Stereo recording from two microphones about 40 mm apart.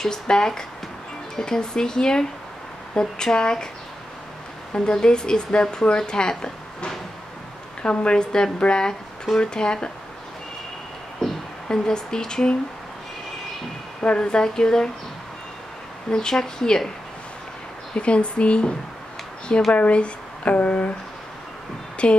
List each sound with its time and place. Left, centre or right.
0.0 s speech: centre
4.7 s speech: centre
11.7 s speech: centre
14.0 s speech: left
16.1 s speech: centre
17.9 s speech: left
19.7 s speech: left
22.0 s speech: left